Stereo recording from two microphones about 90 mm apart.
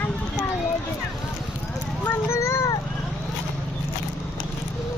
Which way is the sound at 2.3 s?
30° left (ahead or behind).